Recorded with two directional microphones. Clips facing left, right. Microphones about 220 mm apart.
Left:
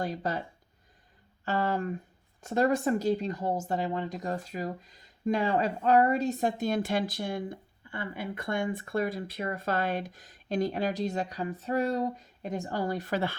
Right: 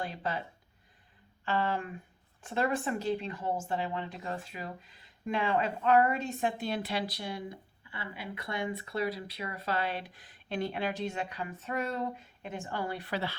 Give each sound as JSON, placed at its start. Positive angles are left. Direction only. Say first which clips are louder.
{"t": 0.0, "sound": "speech", "louder": "left 4 dB", "side_deg": 40}
{"t": 1.5, "sound": "speech", "louder": "left 3 dB", "side_deg": 40}